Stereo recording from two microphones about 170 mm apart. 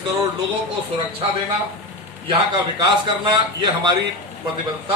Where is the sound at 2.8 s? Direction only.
25° right (ahead or behind).